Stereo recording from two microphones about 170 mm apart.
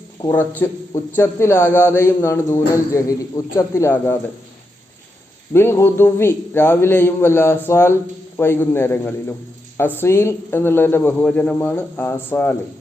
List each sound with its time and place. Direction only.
0.3 s a man's voice: 10° left (ahead or behind)
5.5 s a man's voice: 15° left (ahead or behind)